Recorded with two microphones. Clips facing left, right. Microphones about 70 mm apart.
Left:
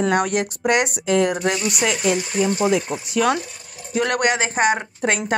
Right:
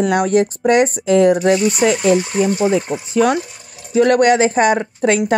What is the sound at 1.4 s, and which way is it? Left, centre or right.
Speech, right.